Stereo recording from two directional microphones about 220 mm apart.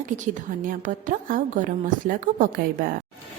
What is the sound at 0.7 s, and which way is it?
A woman's voice, 35° right (ahead or behind).